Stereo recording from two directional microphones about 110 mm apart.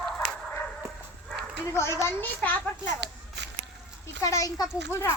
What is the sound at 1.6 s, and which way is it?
Speech, 25° left (ahead or behind).